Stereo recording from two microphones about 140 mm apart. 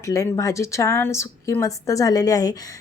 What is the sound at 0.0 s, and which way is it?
A woman's voice, 20° left (ahead or behind).